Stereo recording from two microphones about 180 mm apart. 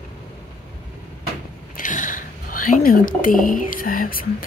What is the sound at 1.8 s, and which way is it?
Speech, 45° left (ahead or behind).